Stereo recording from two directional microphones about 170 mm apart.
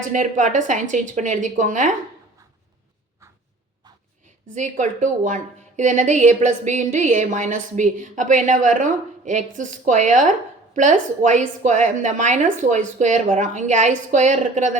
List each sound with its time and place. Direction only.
0.1 s a woman's voice: 50° right (ahead or behind)
4.5 s a woman's voice: 45° right (ahead or behind)